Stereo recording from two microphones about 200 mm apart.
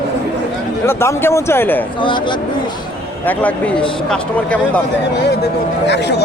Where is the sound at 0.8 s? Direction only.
15° left (ahead or behind).